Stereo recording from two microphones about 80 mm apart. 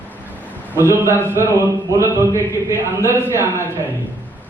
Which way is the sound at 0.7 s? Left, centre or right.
Right.